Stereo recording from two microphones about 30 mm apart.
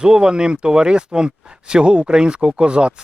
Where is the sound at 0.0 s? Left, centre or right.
Right.